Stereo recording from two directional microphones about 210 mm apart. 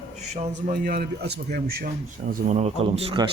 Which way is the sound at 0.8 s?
50° right (ahead or behind).